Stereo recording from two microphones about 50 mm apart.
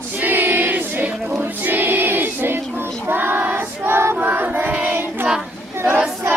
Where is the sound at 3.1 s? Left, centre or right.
Right.